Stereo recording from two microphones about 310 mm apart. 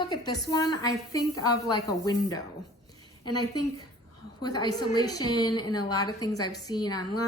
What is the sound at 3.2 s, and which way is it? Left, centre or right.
Speech, left.